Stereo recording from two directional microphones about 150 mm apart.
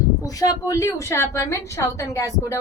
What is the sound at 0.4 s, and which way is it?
A woman's voice, 20° left (ahead or behind).